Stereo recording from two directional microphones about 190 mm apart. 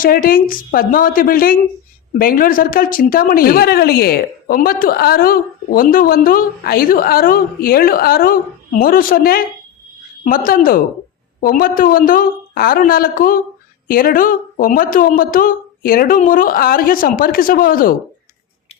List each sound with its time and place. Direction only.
0.0 s a woman's voice: 50° left (ahead or behind)